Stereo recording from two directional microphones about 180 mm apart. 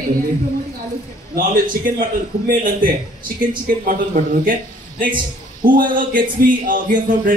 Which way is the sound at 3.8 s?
50° right (ahead or behind).